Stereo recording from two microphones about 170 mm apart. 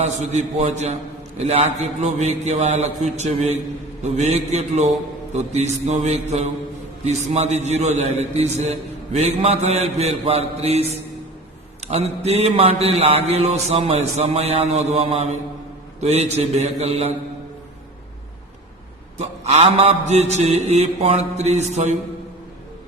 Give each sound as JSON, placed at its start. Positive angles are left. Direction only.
{"t": 0.0, "sound": "a man's voice", "side_deg": -40}
{"t": 19.2, "sound": "a man's voice", "side_deg": -40}